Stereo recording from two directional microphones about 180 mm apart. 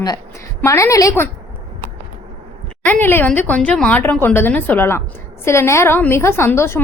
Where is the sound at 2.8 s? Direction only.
10° left (ahead or behind).